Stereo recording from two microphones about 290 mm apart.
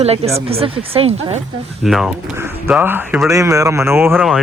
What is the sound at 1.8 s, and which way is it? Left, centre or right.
Speech, centre.